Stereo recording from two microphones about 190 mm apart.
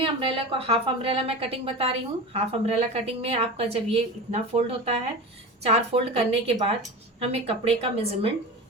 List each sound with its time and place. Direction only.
0.0 s a woman's voice: 30° right (ahead or behind)